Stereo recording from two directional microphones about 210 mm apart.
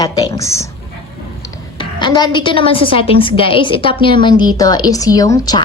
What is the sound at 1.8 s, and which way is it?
A woman's voice, 20° left (ahead or behind).